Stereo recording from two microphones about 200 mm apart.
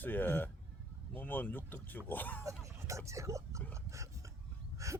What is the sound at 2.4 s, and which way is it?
Speech, 15° right (ahead or behind).